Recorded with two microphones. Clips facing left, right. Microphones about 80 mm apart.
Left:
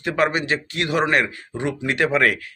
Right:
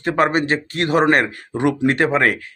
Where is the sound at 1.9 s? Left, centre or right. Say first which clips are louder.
Right 2 dB; right.